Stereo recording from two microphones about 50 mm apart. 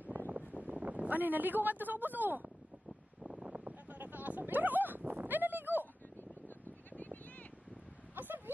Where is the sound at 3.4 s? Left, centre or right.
Right.